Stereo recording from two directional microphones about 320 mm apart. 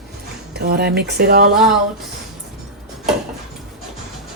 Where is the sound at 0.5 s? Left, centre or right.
Right.